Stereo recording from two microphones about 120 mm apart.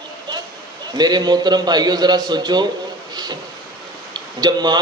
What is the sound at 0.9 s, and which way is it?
A man's voice, 35° right (ahead or behind).